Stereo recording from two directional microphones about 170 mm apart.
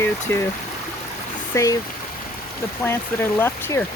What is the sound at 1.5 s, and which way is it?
Speech, 20° left (ahead or behind).